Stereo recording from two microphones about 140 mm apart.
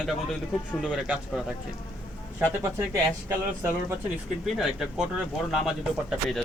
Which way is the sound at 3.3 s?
20° right (ahead or behind).